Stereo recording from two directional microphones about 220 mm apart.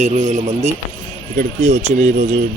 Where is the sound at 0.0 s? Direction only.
30° right (ahead or behind).